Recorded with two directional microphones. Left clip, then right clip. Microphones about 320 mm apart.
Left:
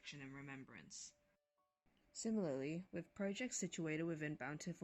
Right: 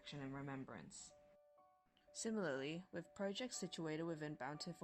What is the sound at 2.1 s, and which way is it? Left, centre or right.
Speech, right.